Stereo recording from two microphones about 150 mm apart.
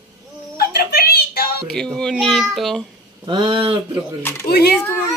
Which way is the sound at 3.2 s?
35° right (ahead or behind).